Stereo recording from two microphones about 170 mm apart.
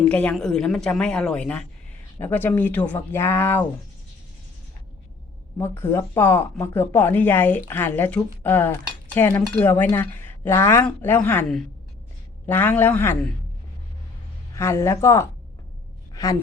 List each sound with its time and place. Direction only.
0.0 s speech: 10° left (ahead or behind)
5.5 s speech: 15° left (ahead or behind)
12.5 s speech: 10° left (ahead or behind)
14.5 s speech: 15° left (ahead or behind)